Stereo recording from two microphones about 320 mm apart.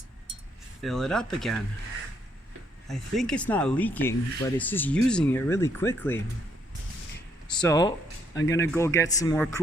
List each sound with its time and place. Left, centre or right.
0.8 s speech: centre
2.8 s speech: centre
7.7 s speech: centre